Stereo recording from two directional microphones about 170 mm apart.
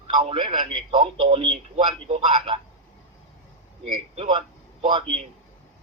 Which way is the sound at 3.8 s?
30° right (ahead or behind).